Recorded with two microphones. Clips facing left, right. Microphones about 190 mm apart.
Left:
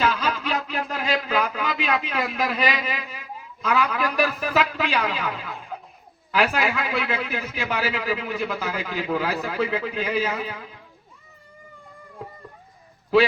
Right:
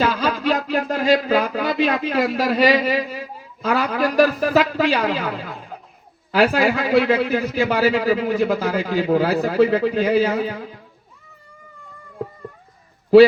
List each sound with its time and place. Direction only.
0.0 s a man's voice: 40° right (ahead or behind)